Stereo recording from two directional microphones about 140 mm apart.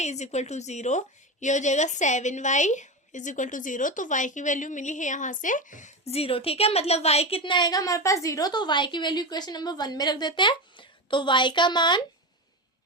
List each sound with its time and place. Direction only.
0.0 s a woman's voice: 55° left (ahead or behind)
6.1 s a woman's voice: 45° left (ahead or behind)